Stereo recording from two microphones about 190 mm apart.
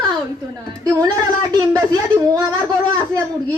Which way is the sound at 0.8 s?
20° right (ahead or behind).